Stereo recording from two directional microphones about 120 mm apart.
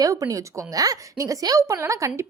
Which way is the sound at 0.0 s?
30° right (ahead or behind).